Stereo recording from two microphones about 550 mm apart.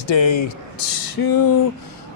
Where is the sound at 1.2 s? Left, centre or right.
Left.